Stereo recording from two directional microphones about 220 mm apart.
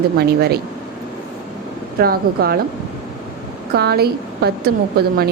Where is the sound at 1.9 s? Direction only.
45° right (ahead or behind).